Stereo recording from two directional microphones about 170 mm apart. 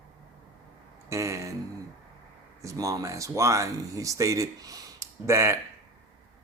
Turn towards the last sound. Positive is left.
turn(degrees=-15)  # may be behind; listen again after turning